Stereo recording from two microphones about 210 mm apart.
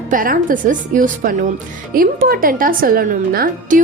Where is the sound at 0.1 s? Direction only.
40° right (ahead or behind).